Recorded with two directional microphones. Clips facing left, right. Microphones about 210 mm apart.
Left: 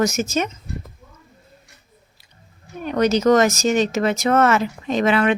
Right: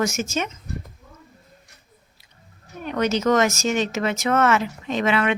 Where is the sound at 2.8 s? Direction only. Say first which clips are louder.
Left 4 dB; 35° left (ahead or behind).